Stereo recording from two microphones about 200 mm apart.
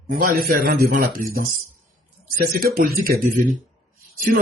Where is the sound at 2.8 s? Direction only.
50° right (ahead or behind).